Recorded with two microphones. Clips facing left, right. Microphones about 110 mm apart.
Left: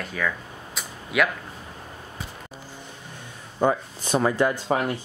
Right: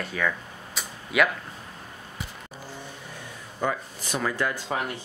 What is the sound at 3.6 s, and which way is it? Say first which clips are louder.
Speech: left 6 dB; 25° left (ahead or behind).